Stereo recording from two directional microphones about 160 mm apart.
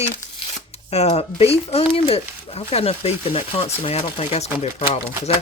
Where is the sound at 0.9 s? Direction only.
40° left (ahead or behind).